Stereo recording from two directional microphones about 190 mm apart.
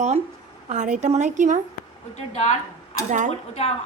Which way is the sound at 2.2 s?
35° left (ahead or behind).